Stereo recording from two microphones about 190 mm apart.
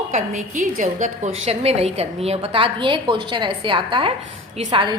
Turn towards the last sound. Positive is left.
turn(degrees=-25)  # may be behind; listen again after turning